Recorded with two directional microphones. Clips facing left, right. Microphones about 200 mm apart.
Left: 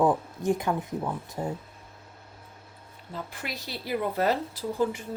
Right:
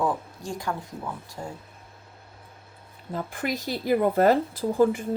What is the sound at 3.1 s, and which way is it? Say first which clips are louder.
A woman's voice: right 7 dB; 50° right (ahead or behind).